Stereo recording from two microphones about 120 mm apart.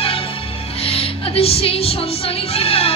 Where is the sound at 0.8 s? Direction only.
50° left (ahead or behind).